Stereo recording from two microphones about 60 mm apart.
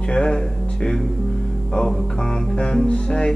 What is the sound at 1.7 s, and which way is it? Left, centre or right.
Music, centre.